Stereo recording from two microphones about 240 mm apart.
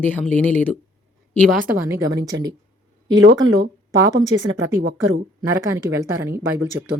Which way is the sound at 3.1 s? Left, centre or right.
Right.